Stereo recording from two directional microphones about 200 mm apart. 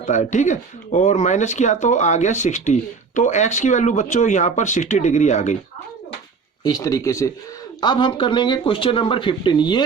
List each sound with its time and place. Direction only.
0.1 s speech: 35° left (ahead or behind)
6.7 s speech: 15° left (ahead or behind)